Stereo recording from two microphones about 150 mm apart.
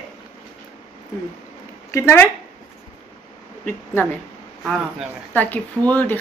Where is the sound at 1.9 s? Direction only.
15° left (ahead or behind).